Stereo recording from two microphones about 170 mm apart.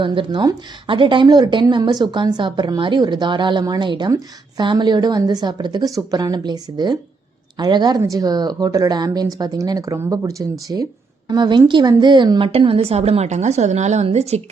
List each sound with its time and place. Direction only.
0.0 s a woman's voice: 30° right (ahead or behind)